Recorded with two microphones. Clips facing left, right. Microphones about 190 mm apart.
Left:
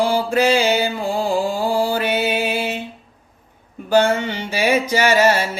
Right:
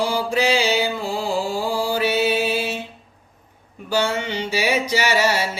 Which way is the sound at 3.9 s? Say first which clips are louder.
Left 6 dB; 55° left (ahead or behind).